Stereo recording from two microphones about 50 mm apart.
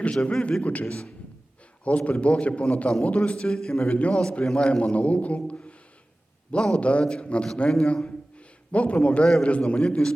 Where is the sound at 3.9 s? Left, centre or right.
Left.